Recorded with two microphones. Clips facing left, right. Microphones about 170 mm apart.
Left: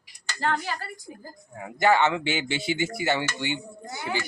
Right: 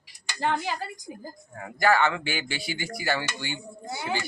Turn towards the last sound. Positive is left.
turn(degrees=20)  # may be behind; listen again after turning